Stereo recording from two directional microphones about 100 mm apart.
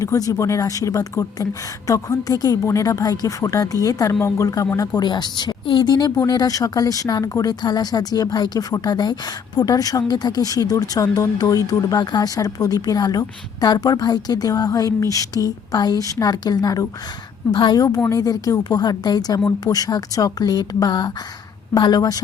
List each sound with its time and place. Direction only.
0.0 s speech: 35° left (ahead or behind)
4.9 s speech: 45° left (ahead or behind)